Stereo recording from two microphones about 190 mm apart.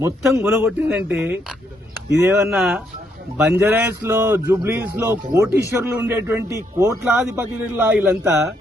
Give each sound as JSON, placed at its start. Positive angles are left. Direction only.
{"t": 0.0, "sound": "a man's voice", "side_deg": -15}
{"t": 2.5, "sound": "a man's voice", "side_deg": 0}